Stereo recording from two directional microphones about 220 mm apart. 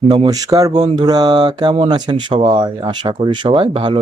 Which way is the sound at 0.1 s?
20° right (ahead or behind).